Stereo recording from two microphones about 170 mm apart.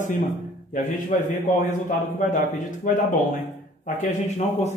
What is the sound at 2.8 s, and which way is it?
Speech, 50° left (ahead or behind).